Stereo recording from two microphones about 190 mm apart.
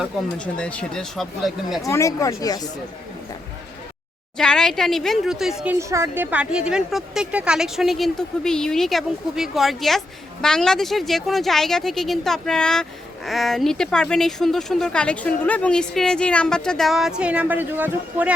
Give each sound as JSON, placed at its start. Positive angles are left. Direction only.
{"t": 0.0, "sound": "speech", "side_deg": 5}
{"t": 1.8, "sound": "speech", "side_deg": 15}
{"t": 4.4, "sound": "speech", "side_deg": 5}
{"t": 5.7, "sound": "speech", "side_deg": -15}